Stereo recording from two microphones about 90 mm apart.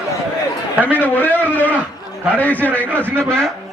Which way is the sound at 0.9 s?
20° left (ahead or behind).